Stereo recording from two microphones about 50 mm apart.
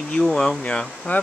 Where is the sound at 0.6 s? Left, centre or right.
Centre.